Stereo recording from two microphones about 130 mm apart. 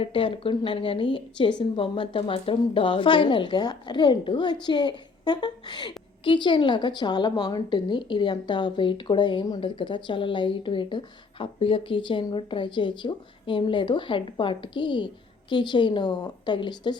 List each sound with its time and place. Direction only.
0.0 s a woman's voice: 45° left (ahead or behind)